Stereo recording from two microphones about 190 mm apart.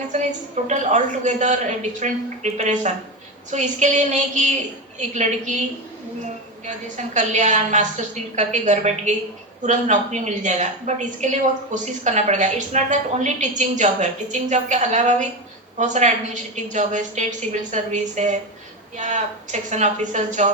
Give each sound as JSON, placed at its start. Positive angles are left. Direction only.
{"t": 0.1, "sound": "a woman's voice", "side_deg": -40}
{"t": 6.7, "sound": "a woman's voice", "side_deg": -40}